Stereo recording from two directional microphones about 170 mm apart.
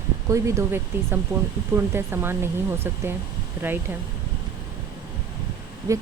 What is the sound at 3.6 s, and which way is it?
Speech, 15° right (ahead or behind).